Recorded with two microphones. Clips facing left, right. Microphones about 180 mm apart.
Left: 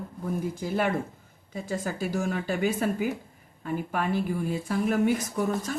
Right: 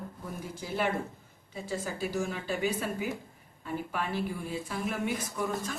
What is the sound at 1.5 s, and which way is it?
A woman's voice, 50° left (ahead or behind).